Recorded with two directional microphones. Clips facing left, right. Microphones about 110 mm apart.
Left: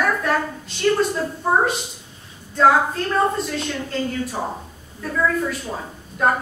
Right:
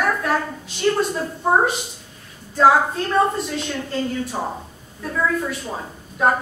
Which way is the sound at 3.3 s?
Centre (ahead or behind).